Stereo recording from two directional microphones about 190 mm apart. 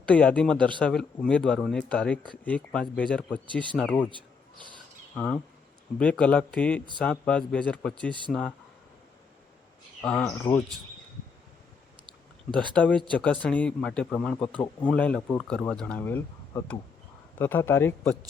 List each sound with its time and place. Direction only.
0.1 s speech: 5° left (ahead or behind)
4.1 s a sound: 25° right (ahead or behind)
5.1 s speech: 5° left (ahead or behind)
10.0 s speech: 5° left (ahead or behind)
12.7 s speech: 5° left (ahead or behind)